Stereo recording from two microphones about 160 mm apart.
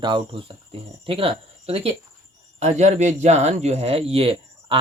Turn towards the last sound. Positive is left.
turn(degrees=-35)  # may be behind; listen again after turning